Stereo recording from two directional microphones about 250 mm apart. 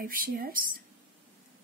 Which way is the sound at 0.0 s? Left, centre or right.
Right.